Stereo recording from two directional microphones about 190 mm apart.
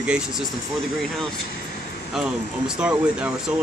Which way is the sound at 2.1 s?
5° right (ahead or behind).